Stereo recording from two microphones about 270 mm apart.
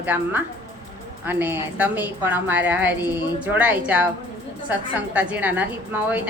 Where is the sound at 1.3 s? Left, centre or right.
Centre.